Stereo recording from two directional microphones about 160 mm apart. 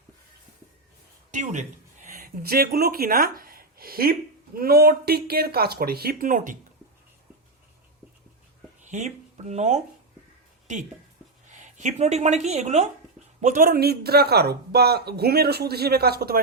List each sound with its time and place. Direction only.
1.3 s a sound: 50° right (ahead or behind)
2.4 s speech: 70° right (ahead or behind); by 6.6 s 55° right (ahead or behind)
8.8 s speech: 50° right (ahead or behind)
13.4 s speech: 55° right (ahead or behind); by 16.4 s 75° right (ahead or behind)